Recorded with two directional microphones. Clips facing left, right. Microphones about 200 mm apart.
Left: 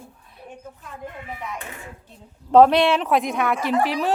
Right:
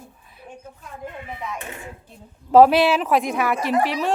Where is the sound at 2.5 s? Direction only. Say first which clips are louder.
Right 1 dB; 5° right (ahead or behind).